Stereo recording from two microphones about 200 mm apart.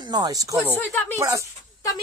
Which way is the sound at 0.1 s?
20° right (ahead or behind).